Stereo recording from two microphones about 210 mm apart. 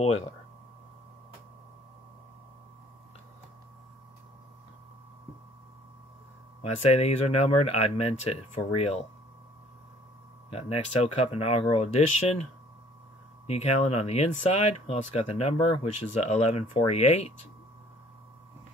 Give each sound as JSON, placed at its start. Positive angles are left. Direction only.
{"t": 6.6, "sound": "speech", "side_deg": 30}
{"t": 10.5, "sound": "speech", "side_deg": 30}
{"t": 13.5, "sound": "speech", "side_deg": 30}